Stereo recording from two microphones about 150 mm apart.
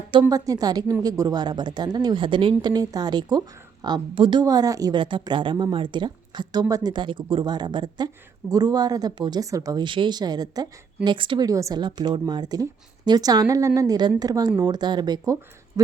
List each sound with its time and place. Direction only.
0.1 s a woman's voice: 30° right (ahead or behind)